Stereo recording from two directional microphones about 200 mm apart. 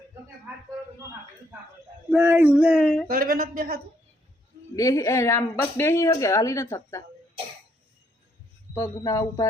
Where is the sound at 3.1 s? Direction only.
45° right (ahead or behind).